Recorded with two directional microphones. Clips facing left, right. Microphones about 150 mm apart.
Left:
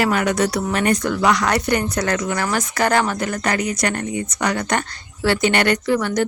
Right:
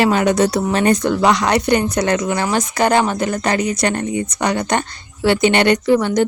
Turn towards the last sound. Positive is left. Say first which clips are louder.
# right 5 dB
turn(degrees=-20)  # may be behind; listen again after turning